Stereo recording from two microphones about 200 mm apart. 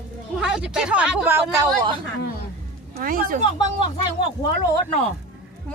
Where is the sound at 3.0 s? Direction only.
45° right (ahead or behind).